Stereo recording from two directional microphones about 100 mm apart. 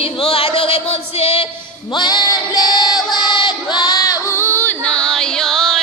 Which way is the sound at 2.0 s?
45° left (ahead or behind).